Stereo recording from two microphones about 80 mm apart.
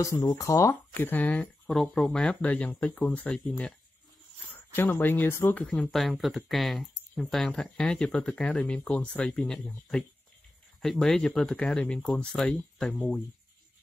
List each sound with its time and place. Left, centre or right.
0.0 s speech: left
1.0 s speech: centre
1.7 s speech: centre
4.7 s speech: left
5.8 s speech: centre